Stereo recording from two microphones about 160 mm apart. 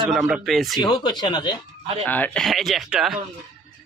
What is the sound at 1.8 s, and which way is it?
Speech, 40° right (ahead or behind).